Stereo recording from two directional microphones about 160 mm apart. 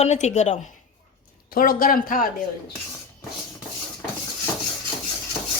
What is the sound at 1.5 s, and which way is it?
Speech, 60° left (ahead or behind).